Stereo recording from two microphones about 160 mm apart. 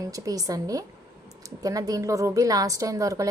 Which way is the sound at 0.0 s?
20° right (ahead or behind).